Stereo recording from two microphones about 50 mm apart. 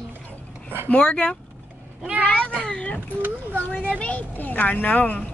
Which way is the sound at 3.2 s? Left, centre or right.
Right.